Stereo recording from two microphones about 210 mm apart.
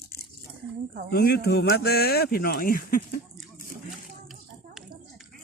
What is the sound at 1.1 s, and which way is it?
A man's voice, 50° left (ahead or behind).